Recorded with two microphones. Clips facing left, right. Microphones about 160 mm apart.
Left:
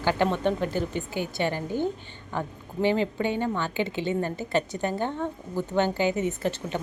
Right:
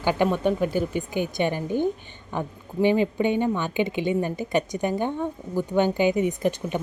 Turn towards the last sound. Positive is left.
turn(degrees=-15)  # may be behind; listen again after turning